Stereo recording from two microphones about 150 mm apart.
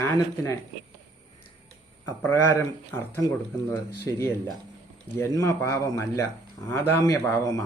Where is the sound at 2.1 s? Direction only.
15° left (ahead or behind).